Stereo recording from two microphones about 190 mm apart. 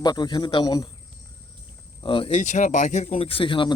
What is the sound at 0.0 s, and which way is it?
Speech, 20° left (ahead or behind).